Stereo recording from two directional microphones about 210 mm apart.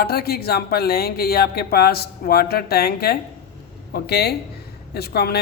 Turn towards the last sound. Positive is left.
turn(degrees=50)  # may be behind; listen again after turning